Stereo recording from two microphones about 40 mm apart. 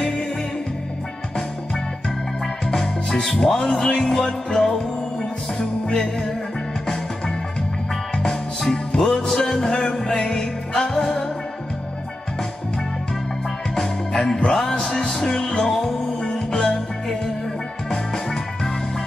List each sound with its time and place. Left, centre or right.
2.6 s music: centre
5.9 s music: centre
7.9 s music: centre
8.9 s music: left
14.1 s music: centre
16.5 s music: centre
17.8 s music: centre